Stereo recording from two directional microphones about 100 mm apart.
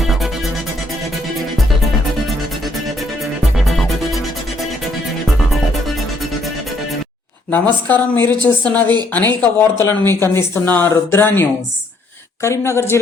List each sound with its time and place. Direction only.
0.0 s music: centre (ahead or behind)
3.6 s music: centre (ahead or behind)
7.5 s speech: 15° left (ahead or behind)